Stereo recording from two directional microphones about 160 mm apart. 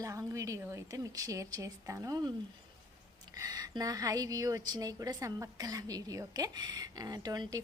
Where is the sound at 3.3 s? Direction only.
25° right (ahead or behind).